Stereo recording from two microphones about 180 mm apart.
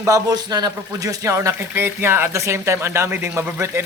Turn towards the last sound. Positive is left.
turn(degrees=-15)  # may be behind; listen again after turning